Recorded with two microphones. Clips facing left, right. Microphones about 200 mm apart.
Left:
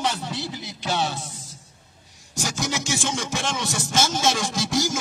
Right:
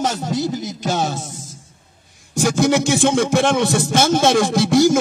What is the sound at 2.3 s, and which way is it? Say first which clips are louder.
Speech: right 12 dB; 55° right (ahead or behind).